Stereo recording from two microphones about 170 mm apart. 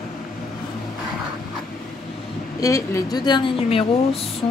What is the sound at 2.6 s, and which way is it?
A woman's voice, 20° left (ahead or behind).